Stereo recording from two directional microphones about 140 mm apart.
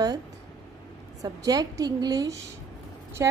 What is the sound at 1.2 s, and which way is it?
A woman's voice, 25° right (ahead or behind).